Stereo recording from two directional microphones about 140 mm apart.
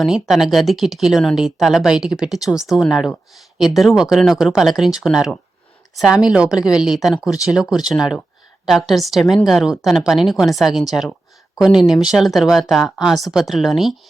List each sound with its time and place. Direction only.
0.0 s speech: centre (ahead or behind)
7.3 s speech: 25° left (ahead or behind)
7.5 s speech: 5° right (ahead or behind)